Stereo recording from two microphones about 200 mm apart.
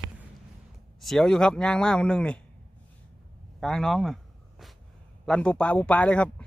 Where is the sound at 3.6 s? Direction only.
Centre (ahead or behind).